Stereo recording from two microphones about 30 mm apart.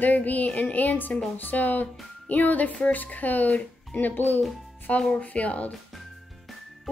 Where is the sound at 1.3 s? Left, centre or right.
Left.